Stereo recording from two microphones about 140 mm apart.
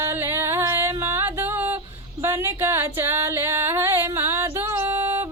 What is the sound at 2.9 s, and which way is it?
Music, 15° right (ahead or behind).